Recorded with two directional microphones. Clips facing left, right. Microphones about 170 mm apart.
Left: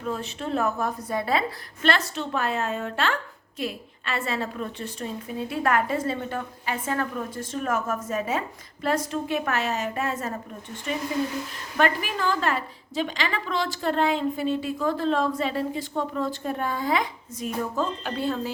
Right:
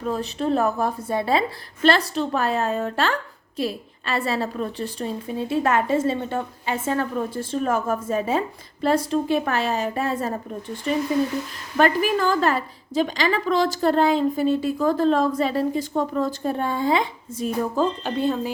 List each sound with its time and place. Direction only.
0.0 s a woman's voice: 35° right (ahead or behind)
18.2 s speech: 20° right (ahead or behind)